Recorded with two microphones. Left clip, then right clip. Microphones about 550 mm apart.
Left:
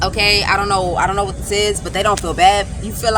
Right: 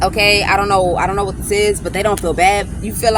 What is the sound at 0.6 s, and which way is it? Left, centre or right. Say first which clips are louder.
Speech: right 2 dB; right.